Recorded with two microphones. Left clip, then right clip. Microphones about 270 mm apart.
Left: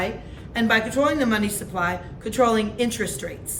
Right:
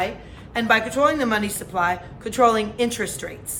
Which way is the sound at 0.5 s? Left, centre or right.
Centre.